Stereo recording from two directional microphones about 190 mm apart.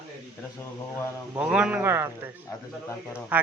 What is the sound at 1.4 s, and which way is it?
Speech, 5° right (ahead or behind).